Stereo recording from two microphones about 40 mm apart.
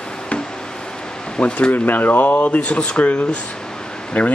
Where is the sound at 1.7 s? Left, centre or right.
Left.